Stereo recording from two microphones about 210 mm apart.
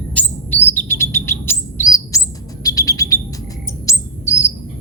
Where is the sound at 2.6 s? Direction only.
15° left (ahead or behind).